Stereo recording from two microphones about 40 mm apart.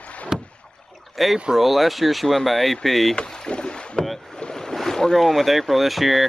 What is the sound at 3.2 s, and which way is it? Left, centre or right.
Rowboat, left.